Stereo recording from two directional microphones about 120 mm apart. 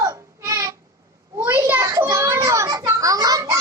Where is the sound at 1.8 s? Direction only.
25° right (ahead or behind).